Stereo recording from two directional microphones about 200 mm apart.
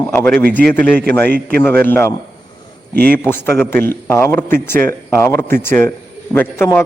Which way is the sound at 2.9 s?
50° right (ahead or behind).